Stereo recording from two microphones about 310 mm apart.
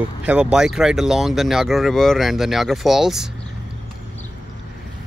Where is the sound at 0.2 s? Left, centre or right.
Centre.